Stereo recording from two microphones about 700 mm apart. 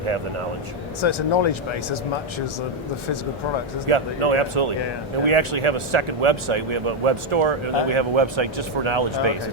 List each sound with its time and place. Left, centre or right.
1.0 s speech: left
3.8 s speech: right